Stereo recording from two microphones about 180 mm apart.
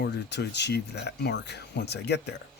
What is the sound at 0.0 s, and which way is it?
Speech, 70° left (ahead or behind).